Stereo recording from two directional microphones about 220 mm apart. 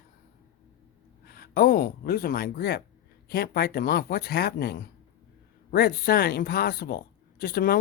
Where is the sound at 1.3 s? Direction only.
45° left (ahead or behind).